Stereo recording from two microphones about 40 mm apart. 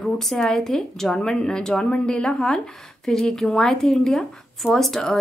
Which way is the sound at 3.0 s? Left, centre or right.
Centre.